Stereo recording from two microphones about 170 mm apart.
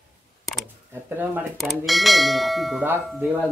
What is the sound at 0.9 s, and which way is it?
Speech, 10° right (ahead or behind).